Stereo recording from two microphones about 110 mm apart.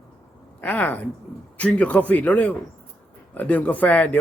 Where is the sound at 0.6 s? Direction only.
15° left (ahead or behind).